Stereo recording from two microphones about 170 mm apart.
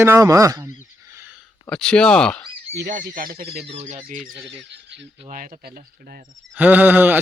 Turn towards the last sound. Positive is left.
turn(degrees=-10)  # may be behind; listen again after turning